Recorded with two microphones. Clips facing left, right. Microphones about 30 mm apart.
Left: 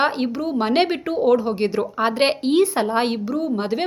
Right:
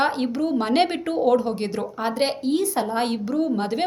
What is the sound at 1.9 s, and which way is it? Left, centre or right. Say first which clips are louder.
Speech: left 3 dB; left.